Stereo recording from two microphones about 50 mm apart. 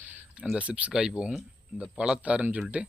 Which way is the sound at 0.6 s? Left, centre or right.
Right.